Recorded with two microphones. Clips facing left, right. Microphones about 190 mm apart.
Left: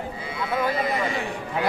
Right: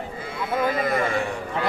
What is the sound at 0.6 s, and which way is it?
Speech, 50° right (ahead or behind).